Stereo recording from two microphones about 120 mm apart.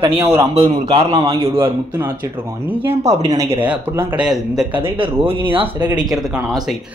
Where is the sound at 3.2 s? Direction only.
25° right (ahead or behind).